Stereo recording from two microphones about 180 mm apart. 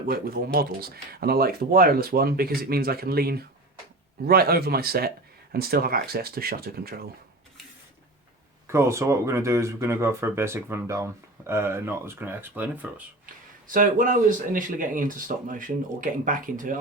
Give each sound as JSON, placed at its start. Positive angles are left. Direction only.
{"t": 0.1, "sound": "speech", "side_deg": -55}
{"t": 8.6, "sound": "speech", "side_deg": -15}
{"t": 13.2, "sound": "speech", "side_deg": -50}